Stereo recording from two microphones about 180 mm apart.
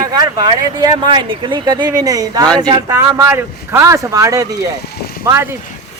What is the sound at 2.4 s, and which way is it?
Speech, 5° left (ahead or behind).